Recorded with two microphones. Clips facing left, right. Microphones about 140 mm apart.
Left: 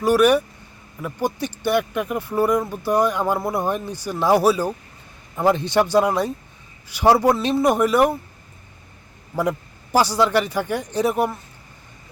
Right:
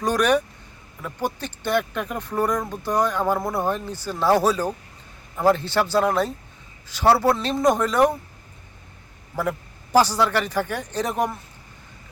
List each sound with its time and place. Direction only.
0.0 s speech: 5° left (ahead or behind)
9.3 s a man's voice: 15° left (ahead or behind)